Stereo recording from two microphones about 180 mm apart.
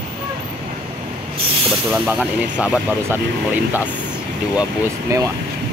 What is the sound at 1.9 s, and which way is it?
Speech, 5° right (ahead or behind).